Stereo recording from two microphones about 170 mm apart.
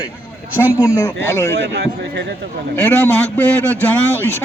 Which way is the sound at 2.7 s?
15° left (ahead or behind).